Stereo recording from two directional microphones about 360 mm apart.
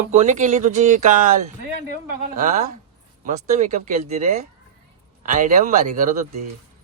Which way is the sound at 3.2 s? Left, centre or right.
Centre.